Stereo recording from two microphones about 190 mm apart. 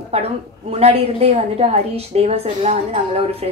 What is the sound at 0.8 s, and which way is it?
Speech, 30° right (ahead or behind).